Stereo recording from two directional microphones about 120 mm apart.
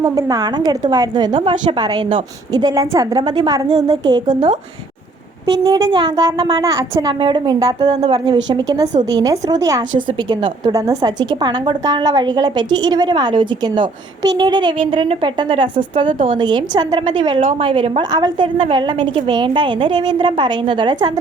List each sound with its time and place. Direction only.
0.0 s a woman's voice: 30° right (ahead or behind)
2.5 s a woman's voice: 30° right (ahead or behind)
5.6 s a woman's voice: 40° right (ahead or behind)
18.1 s a woman's voice: 40° right (ahead or behind)